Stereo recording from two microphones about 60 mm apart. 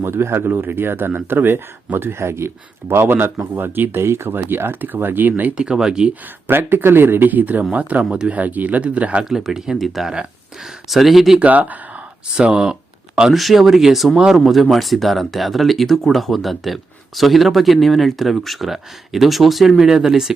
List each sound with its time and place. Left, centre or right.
0.0 s speech: right
5.5 s speech: centre
6.2 s speech: right
9.2 s speech: centre
11.3 s speech: right
12.5 s speech: centre
13.3 s speech: centre